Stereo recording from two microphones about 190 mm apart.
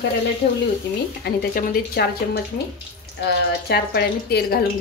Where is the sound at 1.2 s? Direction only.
50° left (ahead or behind).